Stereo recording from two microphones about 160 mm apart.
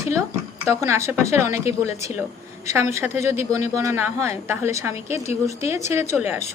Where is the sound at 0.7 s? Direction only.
15° right (ahead or behind).